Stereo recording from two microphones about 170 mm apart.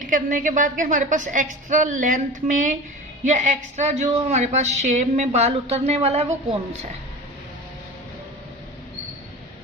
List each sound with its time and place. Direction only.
0.1 s a woman's voice: 50° right (ahead or behind)